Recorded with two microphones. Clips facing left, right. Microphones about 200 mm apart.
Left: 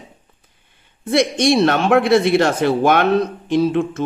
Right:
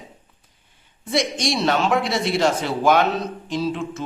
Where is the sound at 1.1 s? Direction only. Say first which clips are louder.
Left 7 dB; 60° left (ahead or behind).